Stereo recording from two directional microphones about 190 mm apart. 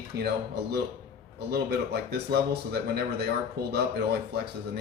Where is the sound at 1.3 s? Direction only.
55° right (ahead or behind).